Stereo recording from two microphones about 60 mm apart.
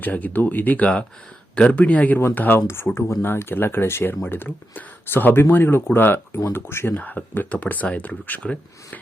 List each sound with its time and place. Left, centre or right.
0.0 s speech: left
2.6 s speech: left
6.9 s speech: left